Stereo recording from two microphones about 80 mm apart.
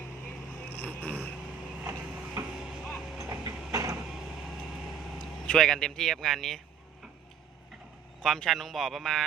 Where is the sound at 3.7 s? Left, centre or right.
Right.